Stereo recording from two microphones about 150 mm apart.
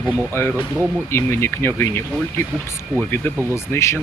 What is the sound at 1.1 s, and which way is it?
Speech, 15° left (ahead or behind).